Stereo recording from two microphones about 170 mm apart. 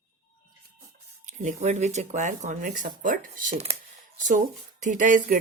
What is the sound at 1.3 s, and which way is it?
Speech, 45° right (ahead or behind).